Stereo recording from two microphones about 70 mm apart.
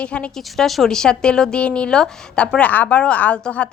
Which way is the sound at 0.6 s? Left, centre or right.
Centre.